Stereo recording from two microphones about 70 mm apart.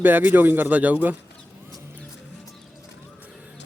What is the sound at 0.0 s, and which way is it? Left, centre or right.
Speech, right.